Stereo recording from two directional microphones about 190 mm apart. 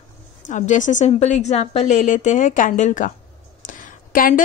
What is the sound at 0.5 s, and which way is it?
A woman's voice, 40° left (ahead or behind).